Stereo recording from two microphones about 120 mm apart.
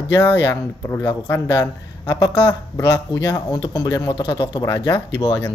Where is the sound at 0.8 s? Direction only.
30° left (ahead or behind).